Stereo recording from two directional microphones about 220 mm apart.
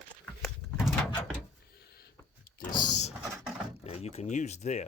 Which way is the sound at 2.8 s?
30° left (ahead or behind).